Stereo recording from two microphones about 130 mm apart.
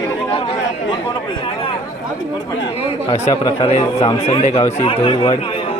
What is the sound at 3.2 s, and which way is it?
Speech, 30° left (ahead or behind).